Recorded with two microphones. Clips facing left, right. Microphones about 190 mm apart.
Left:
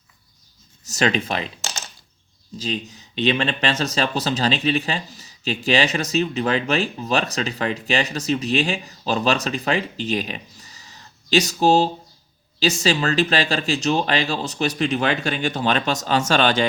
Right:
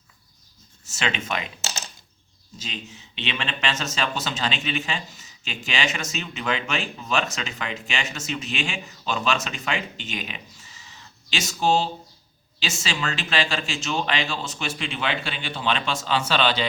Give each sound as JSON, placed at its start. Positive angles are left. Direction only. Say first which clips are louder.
{"t": 0.9, "sound": "speech", "louder": "left 7 dB", "side_deg": 40}
{"t": 2.6, "sound": "speech", "louder": "left 10 dB", "side_deg": 35}